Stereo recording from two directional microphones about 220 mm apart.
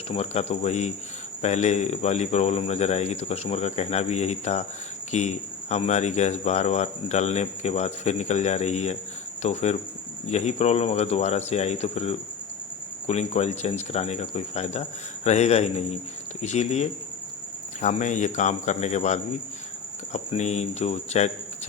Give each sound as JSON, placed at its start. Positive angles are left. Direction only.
{"t": 0.1, "sound": "speech", "side_deg": 30}